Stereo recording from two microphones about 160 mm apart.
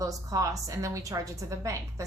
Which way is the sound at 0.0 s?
20° right (ahead or behind).